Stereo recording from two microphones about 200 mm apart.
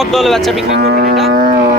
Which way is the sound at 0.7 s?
50° right (ahead or behind).